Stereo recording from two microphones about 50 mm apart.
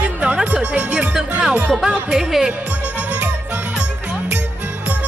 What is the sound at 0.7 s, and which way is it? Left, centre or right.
Speech, centre.